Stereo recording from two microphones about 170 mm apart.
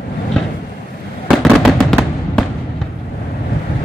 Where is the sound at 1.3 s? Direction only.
Centre (ahead or behind).